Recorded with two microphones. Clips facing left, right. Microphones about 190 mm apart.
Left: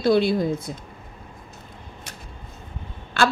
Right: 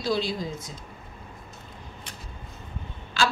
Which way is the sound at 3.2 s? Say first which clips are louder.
Left 5 dB; 60° left (ahead or behind).